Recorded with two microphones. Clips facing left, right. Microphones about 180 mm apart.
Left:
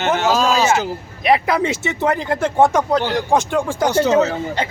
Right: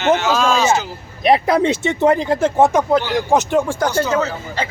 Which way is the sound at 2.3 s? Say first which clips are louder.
Right 1 dB; 10° right (ahead or behind).